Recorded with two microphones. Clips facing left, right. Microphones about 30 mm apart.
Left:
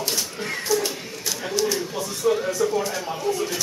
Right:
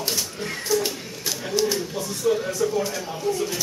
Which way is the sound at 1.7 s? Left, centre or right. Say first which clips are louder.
Even; centre.